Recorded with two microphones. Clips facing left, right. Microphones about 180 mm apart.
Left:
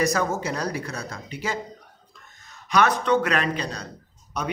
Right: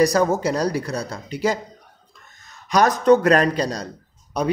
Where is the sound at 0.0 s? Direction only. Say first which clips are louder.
Right 6 dB; 35° right (ahead or behind).